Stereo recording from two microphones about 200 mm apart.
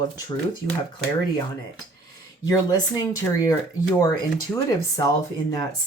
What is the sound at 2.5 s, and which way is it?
Speech, 20° left (ahead or behind).